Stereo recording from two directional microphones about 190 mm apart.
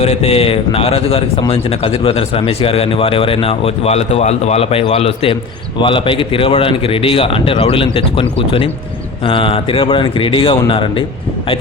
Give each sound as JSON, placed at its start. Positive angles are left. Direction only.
{"t": 0.0, "sound": "a man's voice", "side_deg": 30}